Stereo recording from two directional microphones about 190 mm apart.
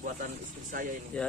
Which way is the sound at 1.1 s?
5° left (ahead or behind).